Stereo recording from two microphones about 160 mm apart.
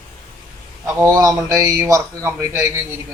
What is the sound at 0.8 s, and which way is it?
Speech, 20° right (ahead or behind).